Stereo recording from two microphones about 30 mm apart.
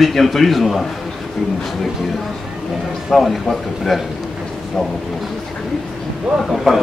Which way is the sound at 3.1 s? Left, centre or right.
Centre.